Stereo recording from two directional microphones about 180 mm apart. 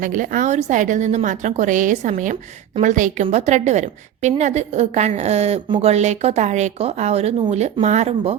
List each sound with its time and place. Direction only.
0.0 s a woman's voice: 45° right (ahead or behind)
5.6 s speech: 25° right (ahead or behind)
5.9 s a woman's voice: 40° right (ahead or behind)